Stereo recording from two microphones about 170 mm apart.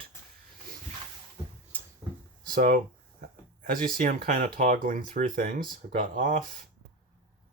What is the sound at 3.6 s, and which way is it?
Speech, 55° right (ahead or behind).